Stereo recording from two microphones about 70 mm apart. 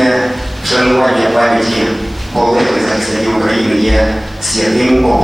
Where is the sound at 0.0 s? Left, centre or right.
Centre.